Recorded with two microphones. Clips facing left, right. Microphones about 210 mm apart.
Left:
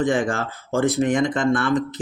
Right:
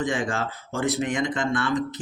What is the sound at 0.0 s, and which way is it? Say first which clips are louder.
Speech: left 5 dB; 50° left (ahead or behind).